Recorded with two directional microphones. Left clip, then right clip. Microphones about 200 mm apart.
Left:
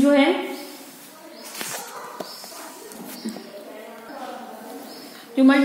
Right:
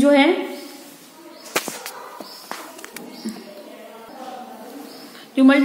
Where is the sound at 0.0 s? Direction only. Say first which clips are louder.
Right 3 dB; 20° right (ahead or behind).